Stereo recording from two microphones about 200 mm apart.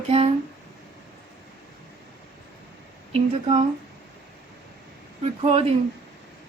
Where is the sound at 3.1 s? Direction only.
30° right (ahead or behind).